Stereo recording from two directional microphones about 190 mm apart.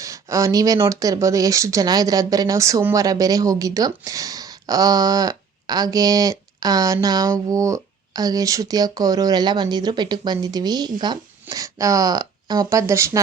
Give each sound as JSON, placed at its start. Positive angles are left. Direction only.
{"t": 0.0, "sound": "speech", "side_deg": -15}